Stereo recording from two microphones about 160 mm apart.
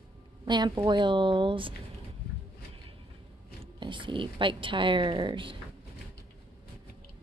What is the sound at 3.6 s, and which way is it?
A woman's voice, 30° right (ahead or behind).